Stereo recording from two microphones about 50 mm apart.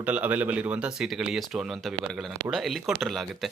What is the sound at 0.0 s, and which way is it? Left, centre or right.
Speech, right.